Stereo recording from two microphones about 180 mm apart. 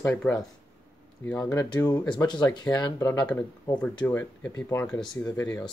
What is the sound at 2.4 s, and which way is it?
Speech, 20° left (ahead or behind).